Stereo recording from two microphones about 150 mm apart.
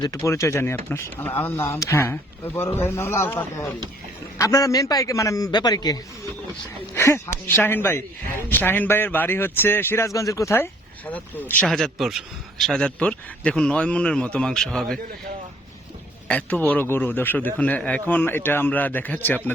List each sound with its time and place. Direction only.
0.0 s a man's voice: 20° left (ahead or behind); by 14.9 s 5° left (ahead or behind)
16.3 s speech: 10° left (ahead or behind)